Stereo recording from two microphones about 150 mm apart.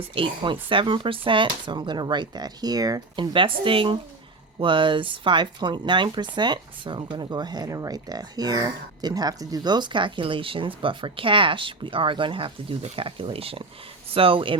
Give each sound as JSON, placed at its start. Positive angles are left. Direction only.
{"t": 0.1, "sound": "speech", "side_deg": -35}